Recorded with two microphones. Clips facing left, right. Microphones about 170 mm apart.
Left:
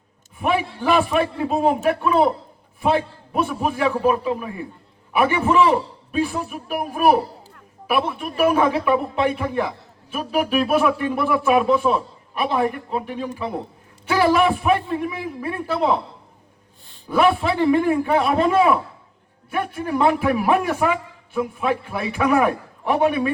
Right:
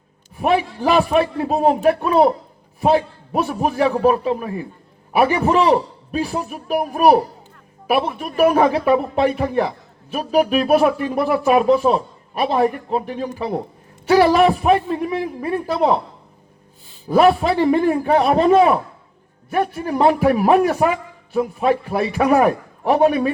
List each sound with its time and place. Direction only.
0.3 s speech: 40° right (ahead or behind)
17.2 s a man's voice: 40° right (ahead or behind)